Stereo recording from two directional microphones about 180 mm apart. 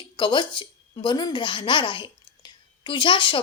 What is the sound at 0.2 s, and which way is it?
A woman's voice, 25° left (ahead or behind).